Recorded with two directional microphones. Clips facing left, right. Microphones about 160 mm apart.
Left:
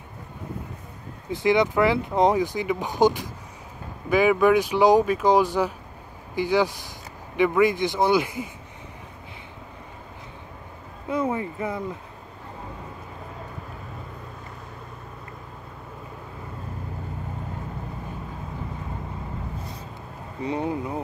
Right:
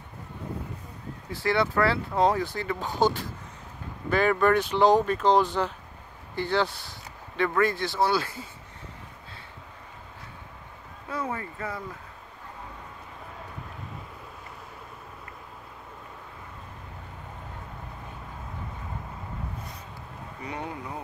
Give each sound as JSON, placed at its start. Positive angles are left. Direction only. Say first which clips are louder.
{"t": 1.3, "sound": "speech", "louder": "left 5 dB", "side_deg": 20}
{"t": 11.1, "sound": "a sound", "louder": "left 7 dB", "side_deg": 20}
{"t": 20.4, "sound": "vehicle", "louder": "left 9 dB", "side_deg": 25}